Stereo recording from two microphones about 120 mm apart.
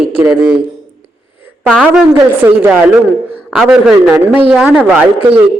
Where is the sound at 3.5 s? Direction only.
5° right (ahead or behind).